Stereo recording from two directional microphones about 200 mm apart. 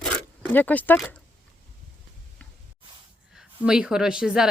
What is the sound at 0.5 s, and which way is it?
Speech, 10° left (ahead or behind).